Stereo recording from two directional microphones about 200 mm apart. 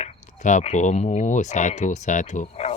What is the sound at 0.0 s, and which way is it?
Speech, 35° left (ahead or behind).